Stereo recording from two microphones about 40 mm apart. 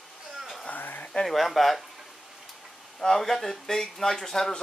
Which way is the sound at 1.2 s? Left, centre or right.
Centre.